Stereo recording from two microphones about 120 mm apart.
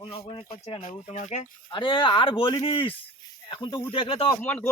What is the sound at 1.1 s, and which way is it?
Speech, 90° left.